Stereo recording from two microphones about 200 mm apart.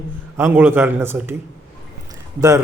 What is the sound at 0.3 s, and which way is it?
Speech, 10° right (ahead or behind).